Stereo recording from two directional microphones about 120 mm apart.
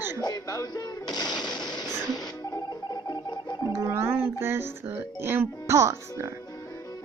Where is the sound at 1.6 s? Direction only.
35° left (ahead or behind).